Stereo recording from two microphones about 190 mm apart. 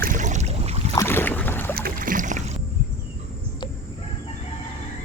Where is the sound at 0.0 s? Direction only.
40° right (ahead or behind).